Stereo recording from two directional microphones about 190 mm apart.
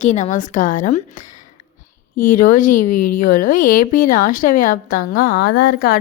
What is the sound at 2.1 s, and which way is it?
A woman's voice, 45° left (ahead or behind).